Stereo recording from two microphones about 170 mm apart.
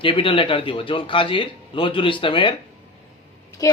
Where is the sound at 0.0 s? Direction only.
30° left (ahead or behind).